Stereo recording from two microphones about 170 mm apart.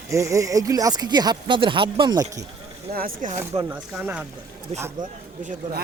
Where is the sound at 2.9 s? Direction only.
60° right (ahead or behind).